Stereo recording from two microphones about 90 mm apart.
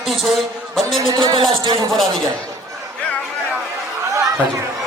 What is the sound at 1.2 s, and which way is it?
Speech, 60° right (ahead or behind).